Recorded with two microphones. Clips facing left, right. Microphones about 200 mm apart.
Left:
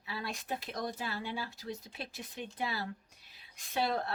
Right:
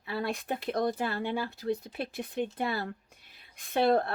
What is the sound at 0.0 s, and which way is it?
A woman's voice, 55° right (ahead or behind).